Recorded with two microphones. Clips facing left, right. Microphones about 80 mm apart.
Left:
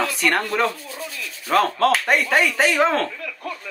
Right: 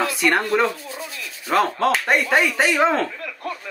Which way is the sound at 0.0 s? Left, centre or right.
Centre.